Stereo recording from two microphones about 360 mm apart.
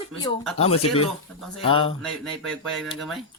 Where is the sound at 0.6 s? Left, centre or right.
Centre.